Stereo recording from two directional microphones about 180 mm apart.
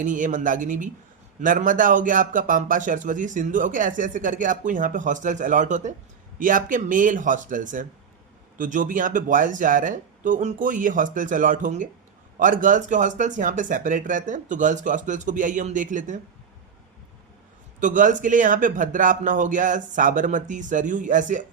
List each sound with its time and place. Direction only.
0.0 s a man's voice: 45° right (ahead or behind)
17.7 s a man's voice: 45° right (ahead or behind)